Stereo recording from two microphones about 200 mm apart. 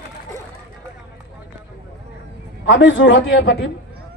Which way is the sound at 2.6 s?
65° left (ahead or behind).